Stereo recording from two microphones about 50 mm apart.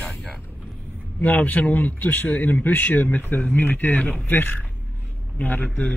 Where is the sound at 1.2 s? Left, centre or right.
Left.